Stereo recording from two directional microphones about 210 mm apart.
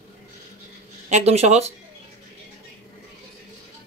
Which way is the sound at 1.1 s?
30° right (ahead or behind).